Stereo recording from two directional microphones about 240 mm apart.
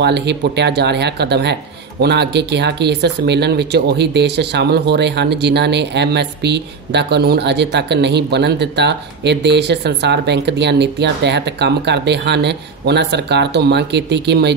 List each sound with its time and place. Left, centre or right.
0.0 s speech: right